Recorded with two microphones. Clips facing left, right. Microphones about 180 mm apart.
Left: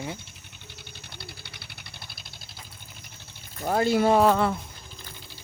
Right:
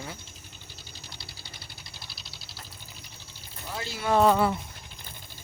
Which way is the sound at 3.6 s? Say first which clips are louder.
Left 14 dB; 50° left (ahead or behind).